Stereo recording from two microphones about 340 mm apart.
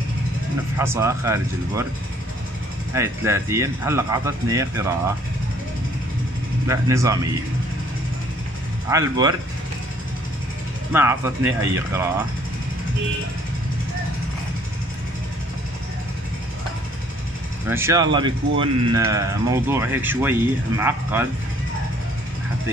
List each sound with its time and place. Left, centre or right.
0.7 s speech: centre
2.9 s speech: centre
6.7 s speech: centre
8.8 s speech: centre
10.9 s speech: centre
17.6 s speech: centre